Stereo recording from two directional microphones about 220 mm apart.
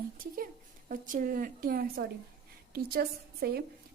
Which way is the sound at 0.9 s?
35° right (ahead or behind).